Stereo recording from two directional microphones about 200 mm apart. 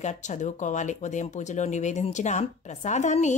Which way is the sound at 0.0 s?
35° left (ahead or behind).